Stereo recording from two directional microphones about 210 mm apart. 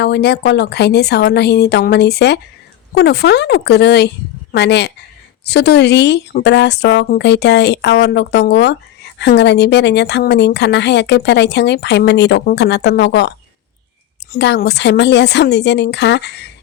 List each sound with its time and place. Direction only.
0.0 s a woman's voice: 50° left (ahead or behind)
14.3 s a woman's voice: 55° left (ahead or behind)